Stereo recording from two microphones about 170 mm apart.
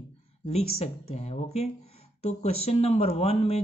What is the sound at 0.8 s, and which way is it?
Speech, 40° left (ahead or behind).